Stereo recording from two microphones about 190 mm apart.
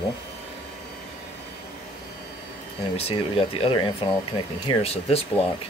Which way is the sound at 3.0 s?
30° left (ahead or behind).